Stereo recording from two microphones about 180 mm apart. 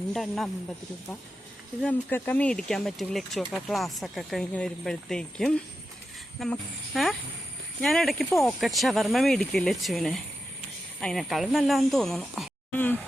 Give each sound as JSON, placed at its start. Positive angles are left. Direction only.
{"t": 0.1, "sound": "speech", "side_deg": 0}
{"t": 1.8, "sound": "speech", "side_deg": 10}